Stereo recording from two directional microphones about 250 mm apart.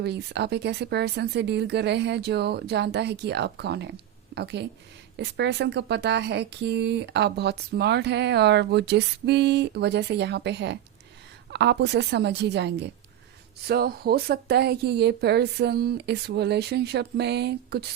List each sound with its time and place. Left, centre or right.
0.0 s speech: right